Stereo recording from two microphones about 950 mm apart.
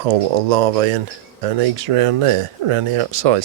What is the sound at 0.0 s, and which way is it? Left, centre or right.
Speech, right.